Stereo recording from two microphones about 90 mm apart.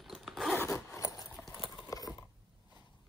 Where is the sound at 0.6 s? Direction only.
35° left (ahead or behind).